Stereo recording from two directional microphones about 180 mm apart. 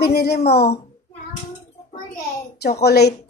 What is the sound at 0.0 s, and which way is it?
Speech, 60° left (ahead or behind).